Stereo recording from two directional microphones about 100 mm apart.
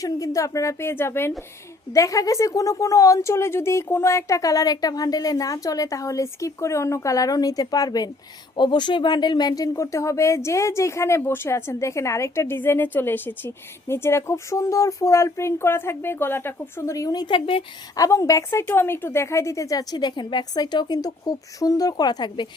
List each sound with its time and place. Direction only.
0.0 s a woman's voice: 35° left (ahead or behind)
1.9 s a woman's voice: 35° left (ahead or behind); by 17.6 s 60° left (ahead or behind)
17.9 s a woman's voice: 35° left (ahead or behind)